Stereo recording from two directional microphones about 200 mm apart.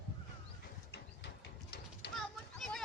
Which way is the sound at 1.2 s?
55° left (ahead or behind).